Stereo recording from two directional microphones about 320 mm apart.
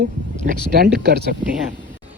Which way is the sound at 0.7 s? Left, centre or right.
Right.